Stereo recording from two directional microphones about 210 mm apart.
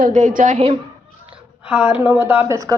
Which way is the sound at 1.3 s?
5° right (ahead or behind).